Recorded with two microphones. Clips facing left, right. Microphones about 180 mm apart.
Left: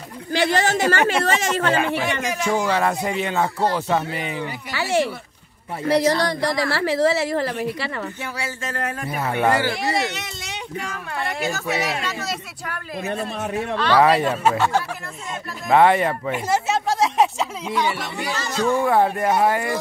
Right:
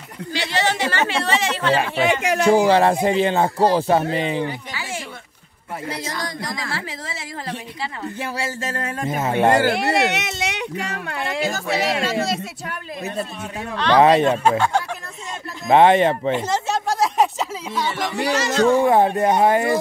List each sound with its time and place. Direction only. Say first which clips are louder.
0.3 s speech: left 3 dB; 50° left (ahead or behind)
2.2 s speech: right 7 dB; 60° right (ahead or behind)
2.5 s speech: right 5 dB; 30° right (ahead or behind)
4.7 s a sound: left 10 dB; 70° left (ahead or behind)
5.9 s speech: left 12 dB; 70° left (ahead or behind)
8.2 s speech: right 3 dB; 30° right (ahead or behind)
9.5 s speech: right 4 dB; 55° right (ahead or behind); by 10.6 s 70° right (ahead or behind)
11.5 s speech: right 3 dB; 30° right (ahead or behind)
15.7 s speech: right 2 dB; 20° right (ahead or behind)
16.3 s a sound: left 1 dB; 10° left (ahead or behind)
17.9 s speech: right 6 dB; 85° right
18.7 s speech: right 1 dB; 25° right (ahead or behind)